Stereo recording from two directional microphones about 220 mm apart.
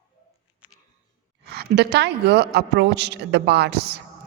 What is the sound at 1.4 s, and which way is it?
A woman's voice, 50° right (ahead or behind).